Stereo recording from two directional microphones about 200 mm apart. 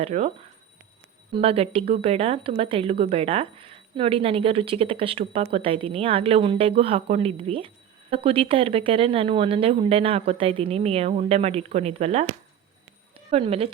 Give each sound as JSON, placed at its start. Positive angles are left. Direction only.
{"t": 0.0, "sound": "speech", "side_deg": -35}
{"t": 1.3, "sound": "speech", "side_deg": -30}